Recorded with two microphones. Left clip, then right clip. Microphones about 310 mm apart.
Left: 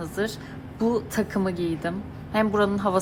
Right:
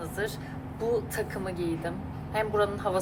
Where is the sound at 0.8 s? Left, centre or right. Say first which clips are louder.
Left 4 dB; centre.